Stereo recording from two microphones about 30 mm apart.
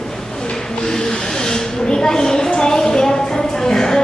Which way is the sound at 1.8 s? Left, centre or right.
Left.